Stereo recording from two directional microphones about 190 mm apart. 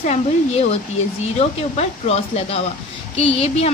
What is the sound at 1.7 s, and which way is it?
A woman's voice, 35° left (ahead or behind).